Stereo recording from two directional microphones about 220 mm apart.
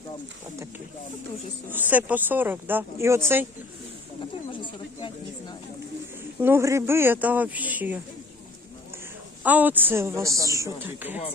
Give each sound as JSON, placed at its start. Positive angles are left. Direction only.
{"t": 1.7, "sound": "a woman's voice", "side_deg": -10}
{"t": 4.6, "sound": "a sound", "side_deg": 20}
{"t": 6.4, "sound": "a woman's voice", "side_deg": -10}
{"t": 9.4, "sound": "a woman's voice", "side_deg": -5}